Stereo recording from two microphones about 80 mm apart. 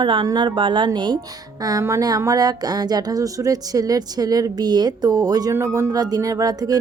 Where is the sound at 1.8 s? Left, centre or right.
Right.